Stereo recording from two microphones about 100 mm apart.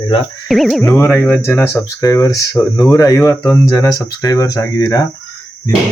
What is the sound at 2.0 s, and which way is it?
Speech, 35° left (ahead or behind).